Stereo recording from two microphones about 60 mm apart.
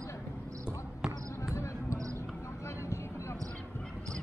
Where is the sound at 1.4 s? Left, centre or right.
Left.